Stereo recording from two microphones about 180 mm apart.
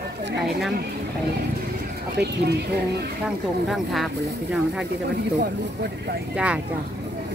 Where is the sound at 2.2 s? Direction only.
65° right (ahead or behind).